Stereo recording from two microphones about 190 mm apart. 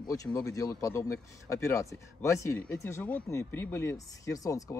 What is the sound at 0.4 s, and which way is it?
Speech, 15° left (ahead or behind).